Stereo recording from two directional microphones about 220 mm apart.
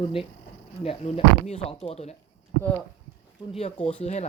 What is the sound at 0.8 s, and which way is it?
Speech, 25° left (ahead or behind).